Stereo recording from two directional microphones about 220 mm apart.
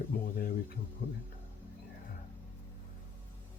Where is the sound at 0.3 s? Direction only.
40° left (ahead or behind).